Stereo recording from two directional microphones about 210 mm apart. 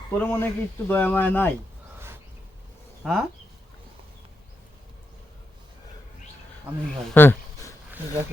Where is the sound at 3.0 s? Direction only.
Centre (ahead or behind).